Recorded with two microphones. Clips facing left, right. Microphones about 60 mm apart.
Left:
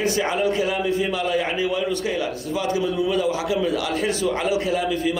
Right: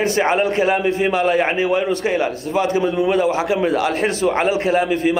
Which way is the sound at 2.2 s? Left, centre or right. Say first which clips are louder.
Right 5 dB; right.